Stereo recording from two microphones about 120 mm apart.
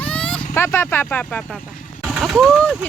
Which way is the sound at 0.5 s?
20° left (ahead or behind).